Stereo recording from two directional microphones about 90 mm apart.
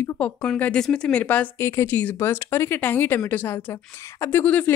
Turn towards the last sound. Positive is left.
turn(degrees=20)  # may be behind; listen again after turning